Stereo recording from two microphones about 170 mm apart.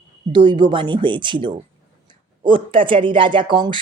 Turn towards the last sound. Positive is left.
turn(degrees=-30)  # may be behind; listen again after turning